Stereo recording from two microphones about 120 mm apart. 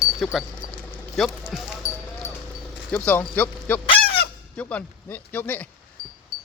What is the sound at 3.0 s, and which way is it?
Speech, 15° left (ahead or behind).